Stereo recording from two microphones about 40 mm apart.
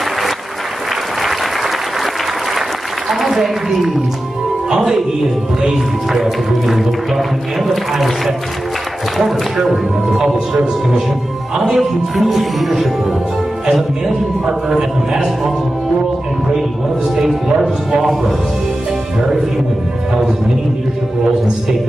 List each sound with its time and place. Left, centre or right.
3.1 s a man's voice: centre
6.1 s speech: centre
9.7 s a man's voice: centre
11.5 s a man's voice: centre
11.8 s speech: centre
14.7 s a man's voice: centre
17.6 s a man's voice: centre